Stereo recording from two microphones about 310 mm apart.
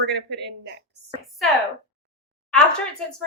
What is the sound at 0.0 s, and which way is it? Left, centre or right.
Speech, right.